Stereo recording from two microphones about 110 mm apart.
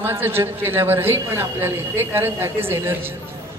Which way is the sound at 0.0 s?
20° right (ahead or behind).